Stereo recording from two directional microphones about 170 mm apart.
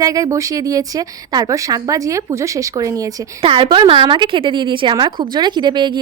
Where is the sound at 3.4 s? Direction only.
30° right (ahead or behind).